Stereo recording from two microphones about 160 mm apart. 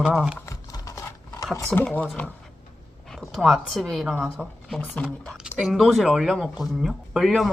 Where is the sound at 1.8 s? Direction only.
10° left (ahead or behind).